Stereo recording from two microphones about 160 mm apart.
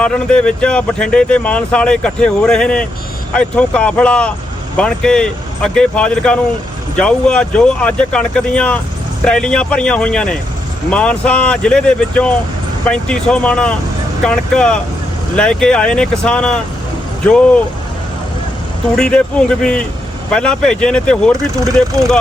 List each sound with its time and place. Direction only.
0.0 s speech: 5° left (ahead or behind)
18.9 s speech: 5° left (ahead or behind)
21.5 s speech: 20° right (ahead or behind)